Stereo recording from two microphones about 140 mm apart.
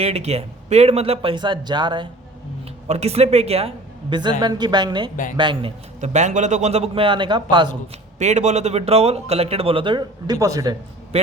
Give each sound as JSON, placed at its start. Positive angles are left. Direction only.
{"t": 0.0, "sound": "speech", "side_deg": -50}
{"t": 2.8, "sound": "speech", "side_deg": -50}
{"t": 4.1, "sound": "a woman's voice", "side_deg": -35}
{"t": 6.0, "sound": "speech", "side_deg": -55}
{"t": 8.2, "sound": "speech", "side_deg": -55}